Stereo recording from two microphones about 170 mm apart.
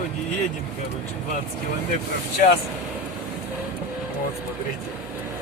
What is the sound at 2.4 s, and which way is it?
Speech, 55° left (ahead or behind).